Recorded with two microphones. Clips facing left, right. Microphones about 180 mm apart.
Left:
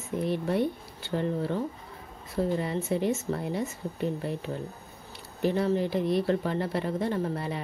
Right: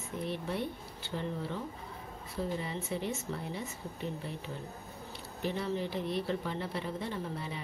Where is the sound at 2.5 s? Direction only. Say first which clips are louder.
Left 8 dB; 65° left (ahead or behind); by 3.7 s 45° left (ahead or behind).